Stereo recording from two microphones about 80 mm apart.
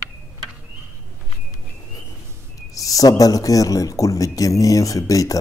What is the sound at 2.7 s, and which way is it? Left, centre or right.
Speech, left.